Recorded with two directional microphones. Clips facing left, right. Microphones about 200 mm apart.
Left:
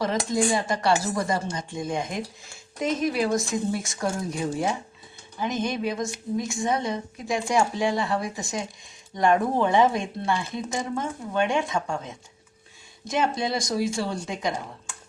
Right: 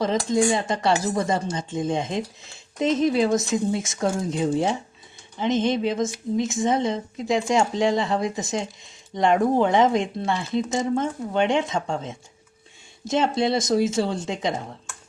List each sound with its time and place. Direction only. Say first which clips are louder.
0.0 s speech: right 3 dB; 20° right (ahead or behind)